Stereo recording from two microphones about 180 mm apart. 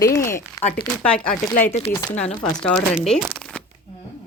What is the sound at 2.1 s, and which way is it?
Speech, 5° left (ahead or behind).